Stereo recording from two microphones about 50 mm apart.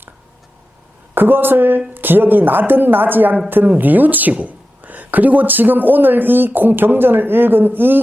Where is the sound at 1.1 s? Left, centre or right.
Right.